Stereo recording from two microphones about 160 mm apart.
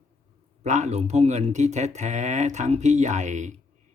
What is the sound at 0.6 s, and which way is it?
Speech, 45° right (ahead or behind).